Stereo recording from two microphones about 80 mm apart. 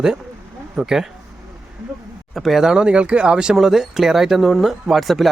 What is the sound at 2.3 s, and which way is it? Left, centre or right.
Speech, centre.